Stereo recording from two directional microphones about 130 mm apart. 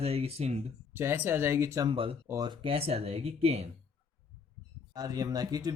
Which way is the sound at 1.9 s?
45° right (ahead or behind).